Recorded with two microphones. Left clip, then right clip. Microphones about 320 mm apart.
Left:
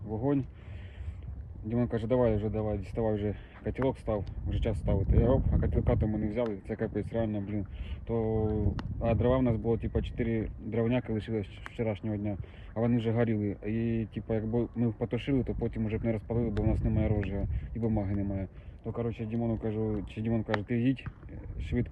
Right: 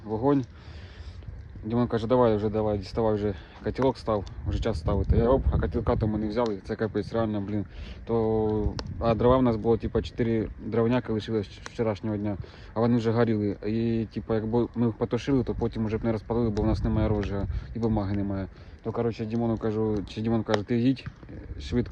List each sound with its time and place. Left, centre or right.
0.1 s speech: right
1.6 s speech: centre
21.7 s speech: right